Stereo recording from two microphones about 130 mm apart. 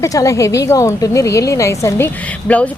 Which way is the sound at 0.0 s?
25° left (ahead or behind).